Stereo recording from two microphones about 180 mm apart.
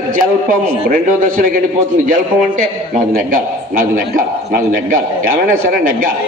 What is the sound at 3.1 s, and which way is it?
A man's voice, 50° right (ahead or behind).